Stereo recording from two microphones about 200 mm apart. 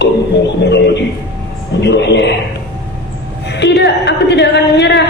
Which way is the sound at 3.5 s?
55° left (ahead or behind).